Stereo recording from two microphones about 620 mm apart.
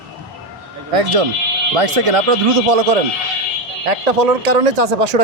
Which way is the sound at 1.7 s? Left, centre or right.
Right.